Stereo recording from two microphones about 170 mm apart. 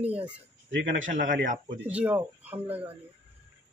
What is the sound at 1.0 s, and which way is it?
Speech, 50° right (ahead or behind).